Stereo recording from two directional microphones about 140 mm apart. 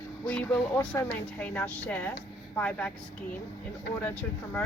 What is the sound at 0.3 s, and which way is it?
Speech, 10° left (ahead or behind).